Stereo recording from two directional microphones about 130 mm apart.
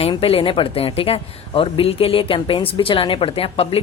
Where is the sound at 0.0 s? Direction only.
45° left (ahead or behind).